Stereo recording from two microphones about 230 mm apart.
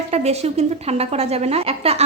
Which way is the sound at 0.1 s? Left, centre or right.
Right.